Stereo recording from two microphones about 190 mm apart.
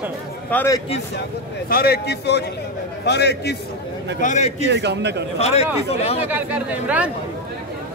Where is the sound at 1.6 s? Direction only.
55° left (ahead or behind).